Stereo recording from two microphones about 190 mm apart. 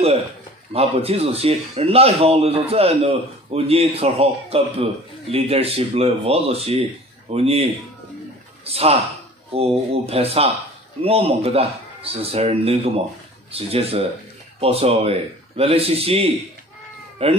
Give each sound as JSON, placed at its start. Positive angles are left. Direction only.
{"t": 0.7, "sound": "a man's voice", "side_deg": -30}
{"t": 8.6, "sound": "a man's voice", "side_deg": -30}